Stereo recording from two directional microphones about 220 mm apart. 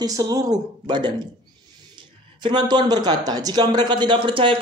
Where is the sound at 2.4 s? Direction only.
20° right (ahead or behind).